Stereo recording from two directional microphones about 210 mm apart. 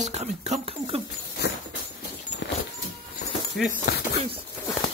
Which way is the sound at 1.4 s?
50° left (ahead or behind).